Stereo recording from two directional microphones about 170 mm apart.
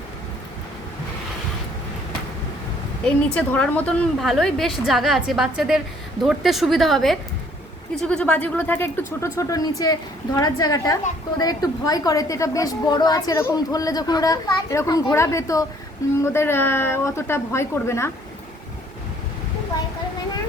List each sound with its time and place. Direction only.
3.2 s a woman's voice: 5° left (ahead or behind)